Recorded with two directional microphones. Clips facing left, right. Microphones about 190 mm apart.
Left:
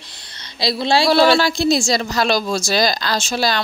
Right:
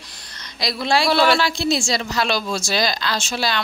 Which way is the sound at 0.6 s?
30° left (ahead or behind).